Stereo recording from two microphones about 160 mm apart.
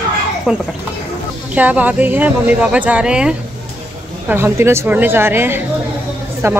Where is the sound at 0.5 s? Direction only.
5° right (ahead or behind).